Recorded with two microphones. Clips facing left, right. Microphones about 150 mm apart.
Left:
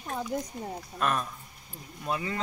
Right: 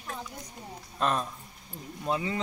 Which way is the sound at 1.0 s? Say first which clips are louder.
Right 1 dB; 25° right (ahead or behind).